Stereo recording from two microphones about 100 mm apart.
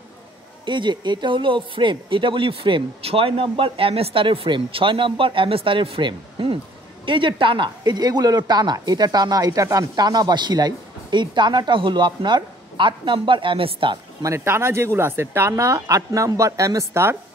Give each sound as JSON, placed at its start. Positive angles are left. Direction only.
{"t": 0.7, "sound": "speech", "side_deg": -50}
{"t": 14.2, "sound": "speech", "side_deg": -25}